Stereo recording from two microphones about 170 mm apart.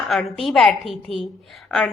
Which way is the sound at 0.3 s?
Centre (ahead or behind).